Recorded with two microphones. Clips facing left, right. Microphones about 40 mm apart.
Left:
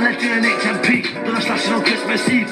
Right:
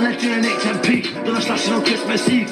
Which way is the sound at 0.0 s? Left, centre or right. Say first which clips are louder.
Left 2 dB; left.